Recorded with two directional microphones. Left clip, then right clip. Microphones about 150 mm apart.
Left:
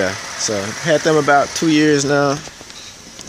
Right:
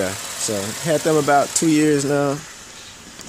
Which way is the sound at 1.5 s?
20° right (ahead or behind).